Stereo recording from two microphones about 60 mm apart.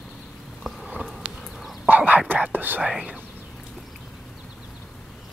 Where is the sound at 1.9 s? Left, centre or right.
Right.